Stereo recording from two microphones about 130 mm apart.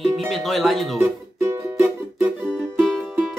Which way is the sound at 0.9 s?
20° right (ahead or behind).